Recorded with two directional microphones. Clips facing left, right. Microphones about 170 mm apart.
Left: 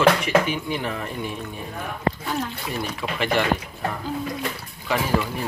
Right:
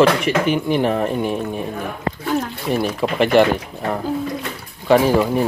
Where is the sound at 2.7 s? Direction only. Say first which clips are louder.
Right 9 dB; 70° right (ahead or behind).